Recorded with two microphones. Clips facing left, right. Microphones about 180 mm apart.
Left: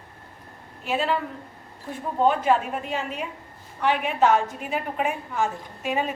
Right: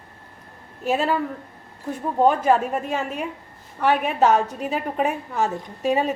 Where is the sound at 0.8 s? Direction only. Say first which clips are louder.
Right 3 dB; 45° right (ahead or behind).